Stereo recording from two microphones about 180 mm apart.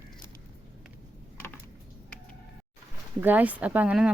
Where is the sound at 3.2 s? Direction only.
10° right (ahead or behind).